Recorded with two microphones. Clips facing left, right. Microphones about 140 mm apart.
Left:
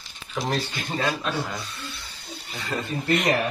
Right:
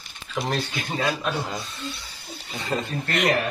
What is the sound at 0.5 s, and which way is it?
Speech, centre (ahead or behind).